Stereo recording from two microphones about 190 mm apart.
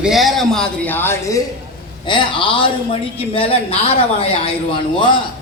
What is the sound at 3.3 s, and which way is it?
Speech, 30° left (ahead or behind).